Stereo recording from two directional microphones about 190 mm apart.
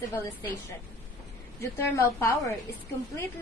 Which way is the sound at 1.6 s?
15° left (ahead or behind).